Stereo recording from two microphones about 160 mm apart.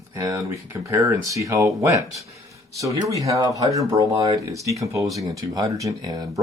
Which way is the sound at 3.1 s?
20° right (ahead or behind).